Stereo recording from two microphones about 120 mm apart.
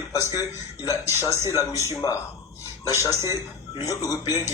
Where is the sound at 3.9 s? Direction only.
30° left (ahead or behind).